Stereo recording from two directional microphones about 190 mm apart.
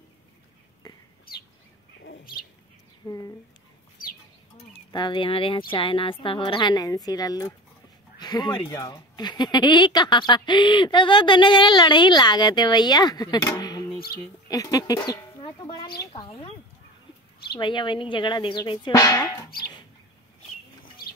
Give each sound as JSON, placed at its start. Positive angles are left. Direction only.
{"t": 2.0, "sound": "bird", "side_deg": 55}
{"t": 3.1, "sound": "speech", "side_deg": 20}
{"t": 4.9, "sound": "speech", "side_deg": 25}
{"t": 13.6, "sound": "a sound", "side_deg": 20}
{"t": 14.5, "sound": "speech", "side_deg": 20}
{"t": 17.6, "sound": "speech", "side_deg": 25}